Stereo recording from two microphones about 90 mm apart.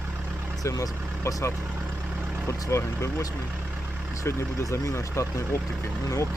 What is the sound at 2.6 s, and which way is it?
Speech, 35° left (ahead or behind).